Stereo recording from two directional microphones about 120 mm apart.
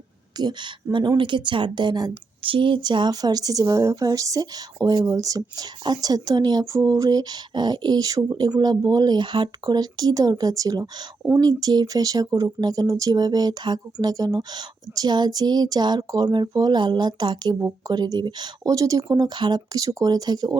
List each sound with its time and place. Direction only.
0.3 s speech: 35° right (ahead or behind)